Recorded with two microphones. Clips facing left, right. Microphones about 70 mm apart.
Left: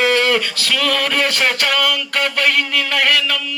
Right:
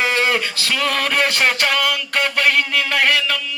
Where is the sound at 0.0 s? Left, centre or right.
Centre.